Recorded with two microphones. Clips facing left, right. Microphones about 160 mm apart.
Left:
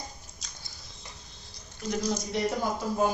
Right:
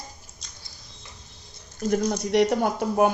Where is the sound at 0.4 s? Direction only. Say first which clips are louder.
Left 1 dB; centre (ahead or behind).